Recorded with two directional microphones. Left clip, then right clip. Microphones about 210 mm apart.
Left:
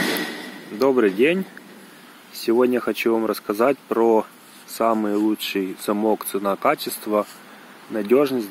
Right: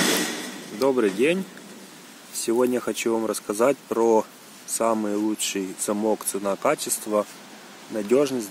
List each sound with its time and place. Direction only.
0.0 s hammer: 20° left (ahead or behind)
2.3 s speech: 15° left (ahead or behind)